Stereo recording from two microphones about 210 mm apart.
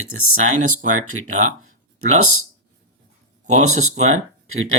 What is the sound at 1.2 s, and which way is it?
Speech, 35° right (ahead or behind).